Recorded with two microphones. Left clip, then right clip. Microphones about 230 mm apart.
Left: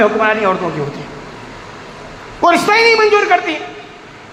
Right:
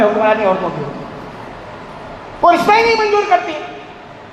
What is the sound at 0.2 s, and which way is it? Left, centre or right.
Speech, left.